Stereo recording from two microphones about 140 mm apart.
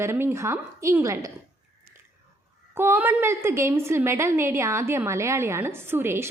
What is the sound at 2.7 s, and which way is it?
A woman's voice, 15° right (ahead or behind).